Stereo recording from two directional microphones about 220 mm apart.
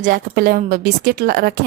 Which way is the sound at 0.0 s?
40° right (ahead or behind).